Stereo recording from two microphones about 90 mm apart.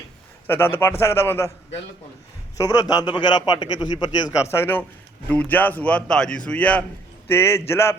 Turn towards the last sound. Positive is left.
turn(degrees=30)  # may be behind; listen again after turning